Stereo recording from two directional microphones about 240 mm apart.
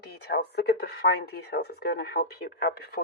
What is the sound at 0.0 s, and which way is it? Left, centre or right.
Speech, left.